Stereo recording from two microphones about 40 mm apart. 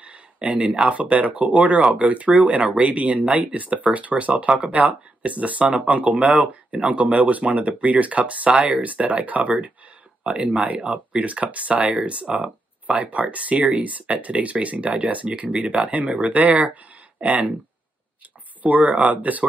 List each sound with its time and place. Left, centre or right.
0.0 s a sound: right
0.9 s speech: right
10.9 s speech: right
18.6 s speech: right